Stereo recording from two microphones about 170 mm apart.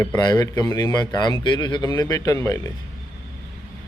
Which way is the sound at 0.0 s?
20° left (ahead or behind).